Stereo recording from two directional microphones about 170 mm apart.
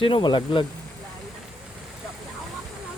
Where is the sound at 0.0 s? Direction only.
30° left (ahead or behind).